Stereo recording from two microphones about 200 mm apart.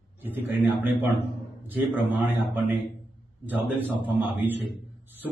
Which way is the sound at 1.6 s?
10° right (ahead or behind).